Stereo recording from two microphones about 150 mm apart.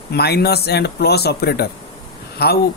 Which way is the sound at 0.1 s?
90° left.